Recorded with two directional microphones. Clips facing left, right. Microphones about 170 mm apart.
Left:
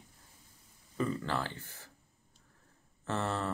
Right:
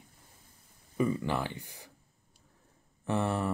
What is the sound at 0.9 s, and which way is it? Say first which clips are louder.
Speech: right 4 dB; 15° right (ahead or behind).